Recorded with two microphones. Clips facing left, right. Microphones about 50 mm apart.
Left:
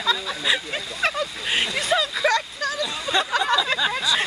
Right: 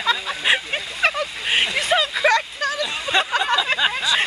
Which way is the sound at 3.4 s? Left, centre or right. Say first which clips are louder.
Right 2 dB; right.